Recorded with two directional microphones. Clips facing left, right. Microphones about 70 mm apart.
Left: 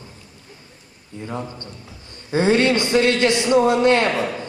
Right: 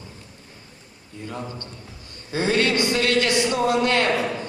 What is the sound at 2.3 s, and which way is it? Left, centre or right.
A man's voice, left.